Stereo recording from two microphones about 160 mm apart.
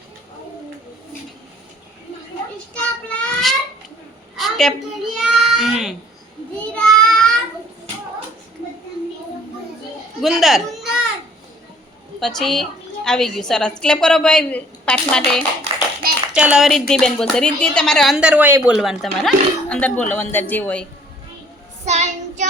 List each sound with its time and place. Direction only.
2.7 s child singing: 5° left (ahead or behind)
4.4 s a sound: centre (ahead or behind)
6.7 s child singing: 5° left (ahead or behind)
10.2 s a sound: centre (ahead or behind)
12.2 s speech: centre (ahead or behind)
16.3 s a woman's voice: 5° right (ahead or behind)
21.8 s child singing: 45° right (ahead or behind)